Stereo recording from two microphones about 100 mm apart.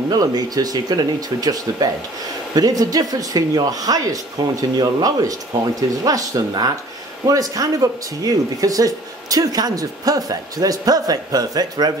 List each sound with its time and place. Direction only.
0.1 s speech: 40° right (ahead or behind)